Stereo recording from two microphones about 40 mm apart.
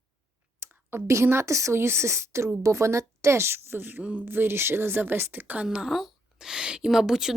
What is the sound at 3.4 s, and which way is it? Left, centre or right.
Speech, right.